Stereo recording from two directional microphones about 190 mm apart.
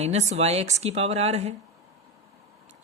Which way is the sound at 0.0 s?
35° right (ahead or behind).